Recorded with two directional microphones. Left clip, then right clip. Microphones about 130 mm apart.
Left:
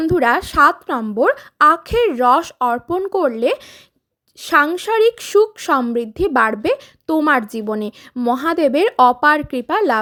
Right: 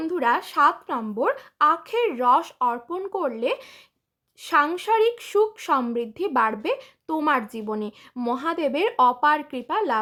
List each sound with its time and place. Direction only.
0.0 s a woman's voice: 45° left (ahead or behind)